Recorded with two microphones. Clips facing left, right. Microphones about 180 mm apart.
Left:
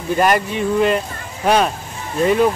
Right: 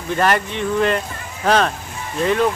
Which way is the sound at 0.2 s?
10° left (ahead or behind).